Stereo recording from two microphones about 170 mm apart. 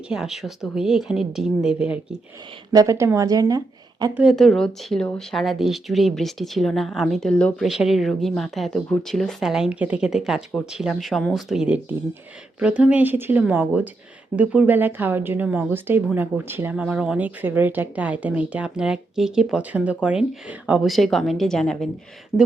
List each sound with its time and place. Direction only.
0.1 s speech: centre (ahead or behind)
2.7 s speech: 15° right (ahead or behind)
4.1 s speech: 5° right (ahead or behind)